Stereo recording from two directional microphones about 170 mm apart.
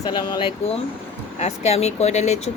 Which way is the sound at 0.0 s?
25° left (ahead or behind).